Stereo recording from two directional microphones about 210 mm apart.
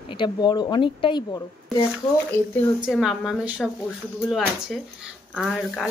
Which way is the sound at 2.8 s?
Centre (ahead or behind).